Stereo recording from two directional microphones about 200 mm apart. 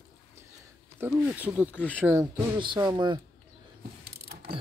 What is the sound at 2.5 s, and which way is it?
Speech, 25° right (ahead or behind).